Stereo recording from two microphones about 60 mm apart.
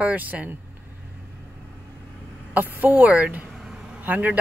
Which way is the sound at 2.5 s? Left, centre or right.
Right.